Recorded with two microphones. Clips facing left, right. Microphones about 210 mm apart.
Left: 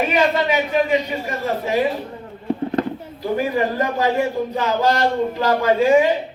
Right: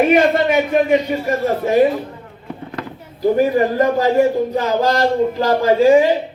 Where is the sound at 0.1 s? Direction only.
50° right (ahead or behind).